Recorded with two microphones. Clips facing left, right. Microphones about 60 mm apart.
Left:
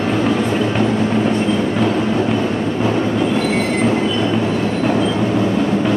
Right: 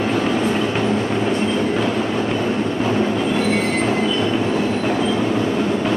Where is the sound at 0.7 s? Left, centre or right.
Centre.